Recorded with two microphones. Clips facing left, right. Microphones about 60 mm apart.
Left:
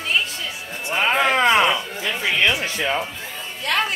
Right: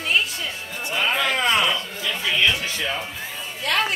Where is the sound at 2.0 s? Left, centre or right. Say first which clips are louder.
Left 2 dB; left.